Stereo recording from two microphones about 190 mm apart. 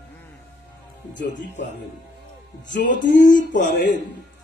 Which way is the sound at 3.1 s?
45° left (ahead or behind).